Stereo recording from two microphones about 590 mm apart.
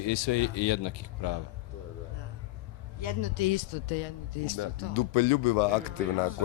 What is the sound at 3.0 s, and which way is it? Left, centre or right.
Speech, left.